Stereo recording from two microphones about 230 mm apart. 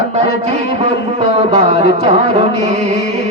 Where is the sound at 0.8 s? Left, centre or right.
Right.